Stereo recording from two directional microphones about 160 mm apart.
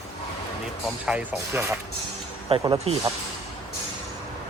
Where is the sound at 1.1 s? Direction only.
5° right (ahead or behind).